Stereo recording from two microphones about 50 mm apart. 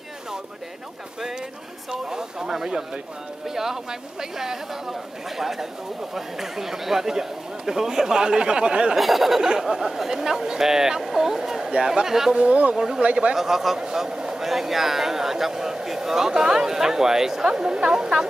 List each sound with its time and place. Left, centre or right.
1.9 s speech: centre
8.9 s speech: centre
12.4 s speech: right
12.7 s speech: centre
13.0 s speech: right
13.4 s speech: centre